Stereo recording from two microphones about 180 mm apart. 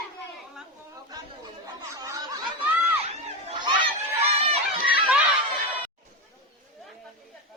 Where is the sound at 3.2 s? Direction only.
30° right (ahead or behind).